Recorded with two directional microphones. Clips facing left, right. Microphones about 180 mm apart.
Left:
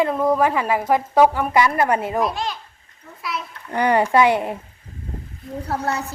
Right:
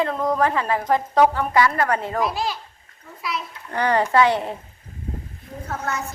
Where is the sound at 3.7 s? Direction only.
15° left (ahead or behind).